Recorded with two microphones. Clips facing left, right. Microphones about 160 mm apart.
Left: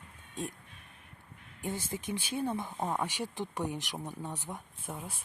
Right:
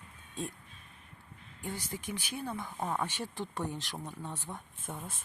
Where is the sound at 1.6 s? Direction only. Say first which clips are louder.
Left 3 dB; 20° left (ahead or behind).